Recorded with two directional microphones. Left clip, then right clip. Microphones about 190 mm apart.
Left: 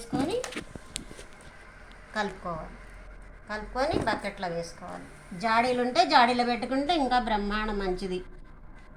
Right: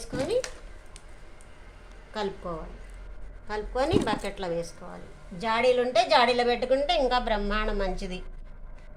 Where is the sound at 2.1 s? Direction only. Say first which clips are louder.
Left 1 dB; 45° right (ahead or behind).